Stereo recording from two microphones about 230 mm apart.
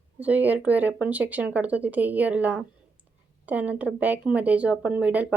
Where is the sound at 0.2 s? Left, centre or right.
Centre.